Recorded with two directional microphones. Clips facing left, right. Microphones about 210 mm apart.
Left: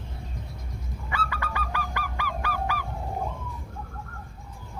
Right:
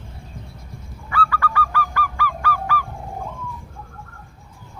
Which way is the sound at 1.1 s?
20° left (ahead or behind).